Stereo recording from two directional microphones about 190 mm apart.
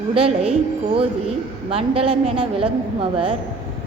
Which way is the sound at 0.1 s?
30° right (ahead or behind).